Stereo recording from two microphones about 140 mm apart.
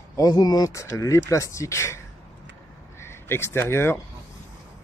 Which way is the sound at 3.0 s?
15° left (ahead or behind).